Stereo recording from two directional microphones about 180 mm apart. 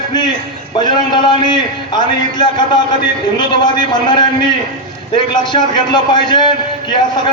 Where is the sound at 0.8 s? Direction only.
25° left (ahead or behind).